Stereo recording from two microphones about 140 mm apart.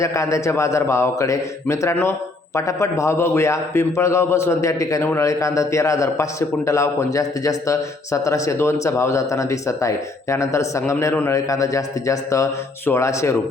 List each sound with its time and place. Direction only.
0.0 s a man's voice: 20° left (ahead or behind)